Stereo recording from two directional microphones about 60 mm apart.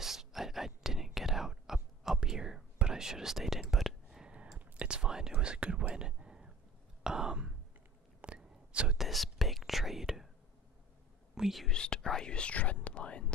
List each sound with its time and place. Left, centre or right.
0.0 s whispering: centre
4.6 s whispering: centre
7.0 s throat clearing: centre
8.2 s whispering: centre
11.3 s whispering: centre
11.6 s whispering: centre